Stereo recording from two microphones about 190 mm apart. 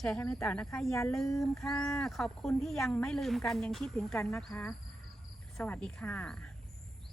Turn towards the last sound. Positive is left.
turn(degrees=5)  # may be behind; listen again after turning